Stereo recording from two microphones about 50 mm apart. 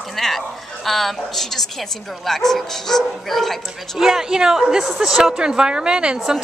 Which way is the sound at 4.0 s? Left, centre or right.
Centre.